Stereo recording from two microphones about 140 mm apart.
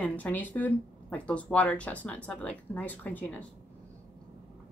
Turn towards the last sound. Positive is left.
turn(degrees=10)  # may be behind; listen again after turning